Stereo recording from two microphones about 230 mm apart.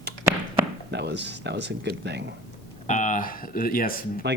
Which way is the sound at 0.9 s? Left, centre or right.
Right.